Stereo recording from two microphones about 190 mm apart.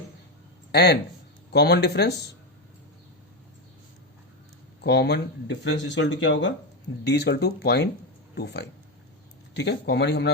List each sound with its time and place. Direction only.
0.7 s speech: 60° left (ahead or behind)
4.8 s speech: 60° left (ahead or behind)
7.0 s speech: 60° left (ahead or behind)